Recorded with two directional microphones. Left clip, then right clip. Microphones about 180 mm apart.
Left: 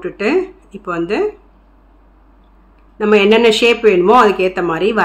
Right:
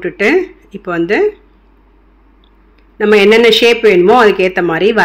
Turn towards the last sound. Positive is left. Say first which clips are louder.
# right 4 dB
turn(degrees=-15)  # may be behind; listen again after turning